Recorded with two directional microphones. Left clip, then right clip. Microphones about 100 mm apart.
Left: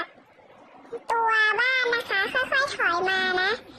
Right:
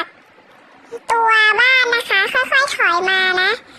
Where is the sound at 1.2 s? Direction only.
15° right (ahead or behind).